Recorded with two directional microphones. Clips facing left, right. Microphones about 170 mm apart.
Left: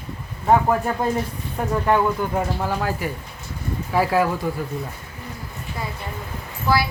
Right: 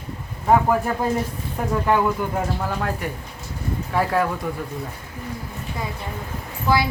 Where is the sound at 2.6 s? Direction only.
Centre (ahead or behind).